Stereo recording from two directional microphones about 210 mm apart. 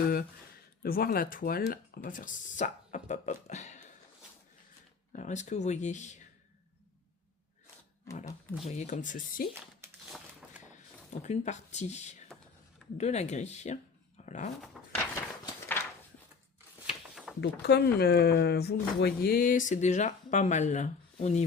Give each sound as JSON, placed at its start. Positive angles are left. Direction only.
{"t": 0.8, "sound": "speech", "side_deg": 45}
{"t": 5.1, "sound": "speech", "side_deg": 35}
{"t": 8.6, "sound": "speech", "side_deg": 35}
{"t": 10.7, "sound": "speech", "side_deg": 35}
{"t": 14.8, "sound": "a sound", "side_deg": 0}
{"t": 15.1, "sound": "a sound", "side_deg": 10}
{"t": 17.4, "sound": "speech", "side_deg": 55}